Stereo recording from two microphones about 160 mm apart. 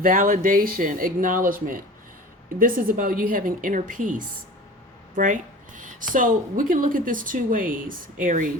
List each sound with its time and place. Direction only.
0.0 s speech: 60° right (ahead or behind)